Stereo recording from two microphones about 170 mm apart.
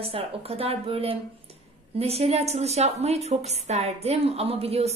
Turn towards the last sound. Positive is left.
turn(degrees=-35)  # may be behind; listen again after turning